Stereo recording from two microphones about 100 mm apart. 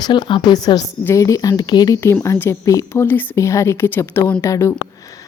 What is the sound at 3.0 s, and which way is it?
A woman's voice, 20° left (ahead or behind).